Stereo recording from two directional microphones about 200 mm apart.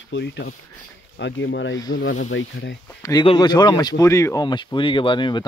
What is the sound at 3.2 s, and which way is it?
Speech, 20° left (ahead or behind).